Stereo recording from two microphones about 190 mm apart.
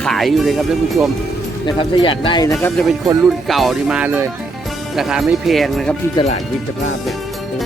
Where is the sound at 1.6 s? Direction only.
25° left (ahead or behind).